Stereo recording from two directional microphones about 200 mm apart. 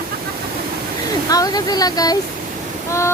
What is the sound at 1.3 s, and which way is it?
Speech, 20° left (ahead or behind).